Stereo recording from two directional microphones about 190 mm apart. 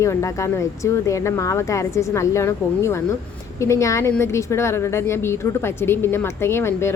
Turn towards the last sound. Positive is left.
turn(degrees=15)  # may be behind; listen again after turning